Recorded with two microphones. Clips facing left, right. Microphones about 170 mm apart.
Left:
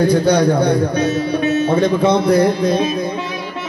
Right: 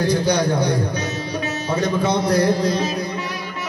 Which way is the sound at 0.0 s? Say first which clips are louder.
Left 6 dB; 55° left (ahead or behind).